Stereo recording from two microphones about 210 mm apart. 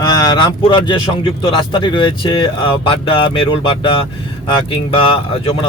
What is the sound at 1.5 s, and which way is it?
Speech, 25° left (ahead or behind).